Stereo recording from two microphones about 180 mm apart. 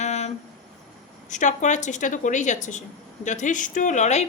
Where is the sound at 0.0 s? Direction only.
40° left (ahead or behind).